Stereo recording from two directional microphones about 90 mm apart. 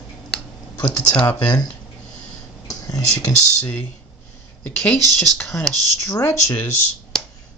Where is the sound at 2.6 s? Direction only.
45° left (ahead or behind).